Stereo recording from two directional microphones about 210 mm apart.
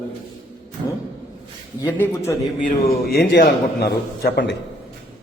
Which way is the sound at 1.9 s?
10° left (ahead or behind).